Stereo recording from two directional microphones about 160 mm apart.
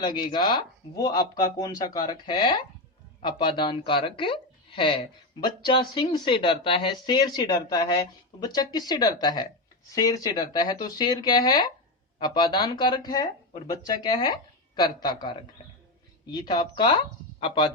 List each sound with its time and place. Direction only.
0.0 s speech: 30° left (ahead or behind)